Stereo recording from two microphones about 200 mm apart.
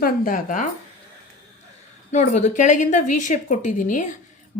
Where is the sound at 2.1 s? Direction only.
35° left (ahead or behind).